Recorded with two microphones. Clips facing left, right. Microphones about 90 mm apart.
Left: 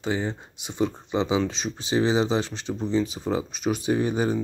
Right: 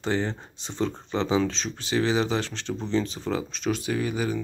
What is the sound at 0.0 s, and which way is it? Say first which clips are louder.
Speech: even; 10° left (ahead or behind).